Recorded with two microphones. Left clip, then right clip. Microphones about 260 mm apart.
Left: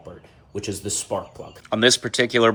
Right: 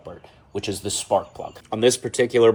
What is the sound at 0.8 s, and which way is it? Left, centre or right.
Speech, right.